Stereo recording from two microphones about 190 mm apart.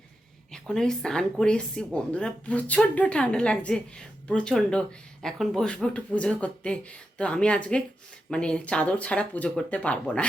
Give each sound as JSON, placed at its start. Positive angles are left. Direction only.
{"t": 0.5, "sound": "a woman's voice", "side_deg": 5}